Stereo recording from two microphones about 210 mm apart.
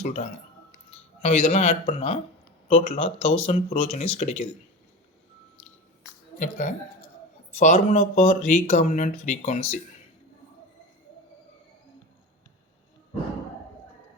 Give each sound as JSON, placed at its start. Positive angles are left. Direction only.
{"t": 1.2, "sound": "speech", "side_deg": 30}
{"t": 6.4, "sound": "speech", "side_deg": 35}